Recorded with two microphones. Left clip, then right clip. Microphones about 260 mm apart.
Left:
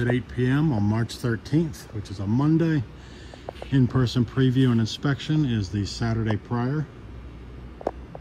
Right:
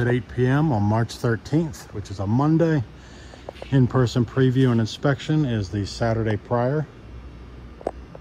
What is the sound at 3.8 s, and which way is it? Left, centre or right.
Speech, centre.